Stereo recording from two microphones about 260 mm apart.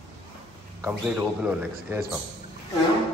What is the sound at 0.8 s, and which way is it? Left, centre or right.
A man's voice, centre.